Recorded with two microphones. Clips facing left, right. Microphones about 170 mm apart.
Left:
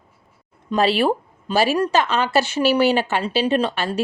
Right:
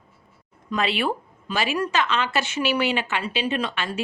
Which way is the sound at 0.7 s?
35° left (ahead or behind).